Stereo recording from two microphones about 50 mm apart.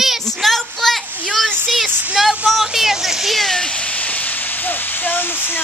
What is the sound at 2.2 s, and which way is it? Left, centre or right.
Speech, centre.